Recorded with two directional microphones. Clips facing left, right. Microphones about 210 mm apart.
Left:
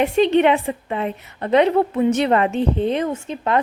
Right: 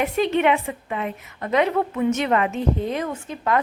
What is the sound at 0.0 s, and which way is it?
A woman's voice, 30° left (ahead or behind).